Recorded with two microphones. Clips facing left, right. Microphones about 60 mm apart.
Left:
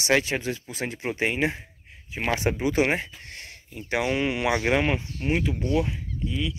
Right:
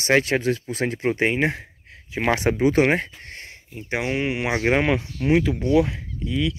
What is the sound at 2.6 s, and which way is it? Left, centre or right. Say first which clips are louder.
Speech: right 6 dB; right.